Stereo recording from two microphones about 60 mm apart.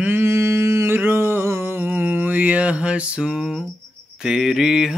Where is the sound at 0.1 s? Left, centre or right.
Right.